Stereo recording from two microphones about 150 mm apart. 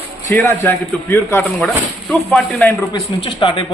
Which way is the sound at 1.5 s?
Centre (ahead or behind).